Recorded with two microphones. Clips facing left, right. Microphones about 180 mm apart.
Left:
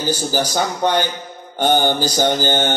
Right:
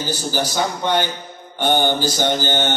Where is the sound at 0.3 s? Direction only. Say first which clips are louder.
Left 2 dB; 45° left (ahead or behind).